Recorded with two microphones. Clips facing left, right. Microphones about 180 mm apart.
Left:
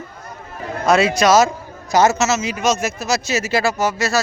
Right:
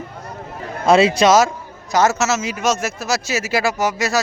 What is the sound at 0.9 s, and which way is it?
Speech, 30° right (ahead or behind).